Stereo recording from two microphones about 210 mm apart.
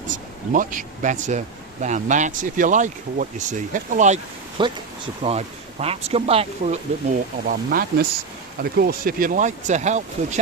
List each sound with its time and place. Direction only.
0.1 s speech: 40° right (ahead or behind)
7.4 s speech: 45° right (ahead or behind)